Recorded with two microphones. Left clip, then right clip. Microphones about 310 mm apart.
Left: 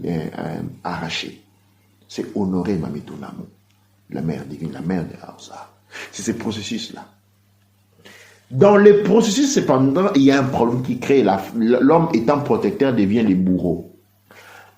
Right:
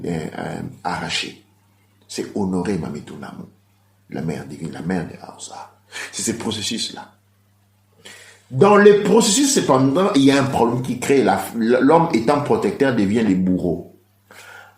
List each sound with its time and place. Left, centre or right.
0.0 s speech: centre
8.5 s speech: centre